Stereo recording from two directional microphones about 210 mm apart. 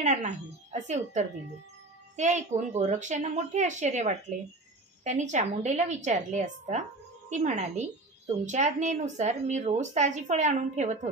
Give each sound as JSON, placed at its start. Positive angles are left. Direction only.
{"t": 0.0, "sound": "speech", "side_deg": -35}